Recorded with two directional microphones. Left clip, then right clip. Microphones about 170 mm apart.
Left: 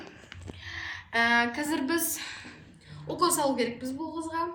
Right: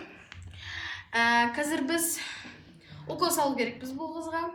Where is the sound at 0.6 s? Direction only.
15° right (ahead or behind).